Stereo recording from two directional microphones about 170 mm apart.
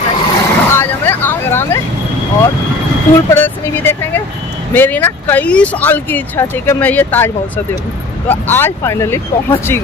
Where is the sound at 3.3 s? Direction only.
10° left (ahead or behind).